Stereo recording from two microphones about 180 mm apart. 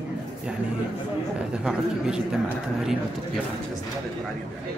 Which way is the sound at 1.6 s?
5° right (ahead or behind).